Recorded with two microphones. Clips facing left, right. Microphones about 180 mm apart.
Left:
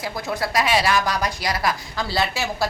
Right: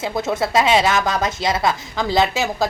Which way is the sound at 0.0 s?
25° right (ahead or behind).